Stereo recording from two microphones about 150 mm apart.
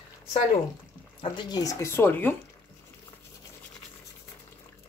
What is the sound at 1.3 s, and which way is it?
Speech, 25° left (ahead or behind).